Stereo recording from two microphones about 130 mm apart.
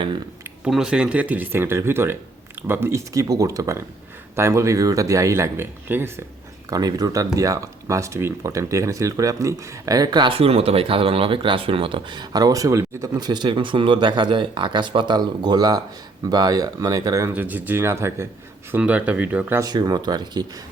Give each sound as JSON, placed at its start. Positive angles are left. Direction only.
{"t": 0.6, "sound": "speech", "side_deg": -5}
{"t": 6.7, "sound": "speech", "side_deg": -30}
{"t": 17.3, "sound": "speech", "side_deg": -15}
{"t": 19.6, "sound": "speech", "side_deg": -30}